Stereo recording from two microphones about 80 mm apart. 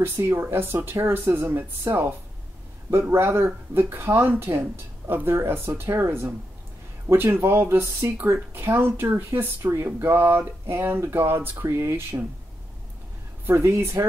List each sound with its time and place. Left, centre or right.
0.0 s speech: right
13.5 s speech: right